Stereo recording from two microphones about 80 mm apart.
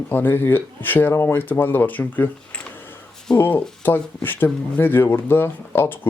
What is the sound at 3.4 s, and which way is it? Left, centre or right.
Speech, left.